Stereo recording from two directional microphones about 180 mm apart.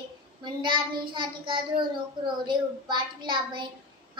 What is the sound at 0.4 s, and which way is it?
Child singing, 25° right (ahead or behind).